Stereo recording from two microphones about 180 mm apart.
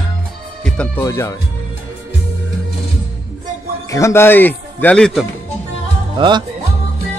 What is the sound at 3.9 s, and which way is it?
Speech, 15° left (ahead or behind).